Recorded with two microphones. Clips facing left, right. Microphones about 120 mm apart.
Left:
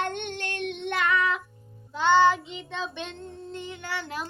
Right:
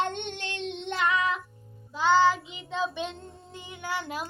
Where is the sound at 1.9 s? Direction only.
5° right (ahead or behind).